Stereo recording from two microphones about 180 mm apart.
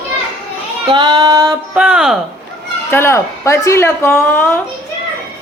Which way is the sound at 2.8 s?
15° left (ahead or behind).